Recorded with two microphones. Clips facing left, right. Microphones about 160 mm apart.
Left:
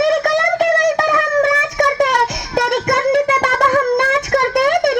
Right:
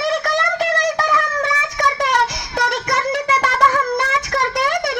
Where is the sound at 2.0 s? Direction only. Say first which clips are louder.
Left 3 dB; 50° left (ahead or behind).